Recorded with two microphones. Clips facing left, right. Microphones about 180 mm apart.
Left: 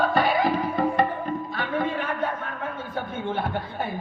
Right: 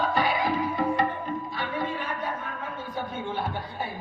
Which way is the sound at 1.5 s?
50° left (ahead or behind).